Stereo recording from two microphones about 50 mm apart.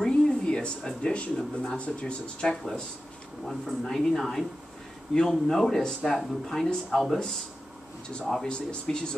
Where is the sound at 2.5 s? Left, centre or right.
Centre.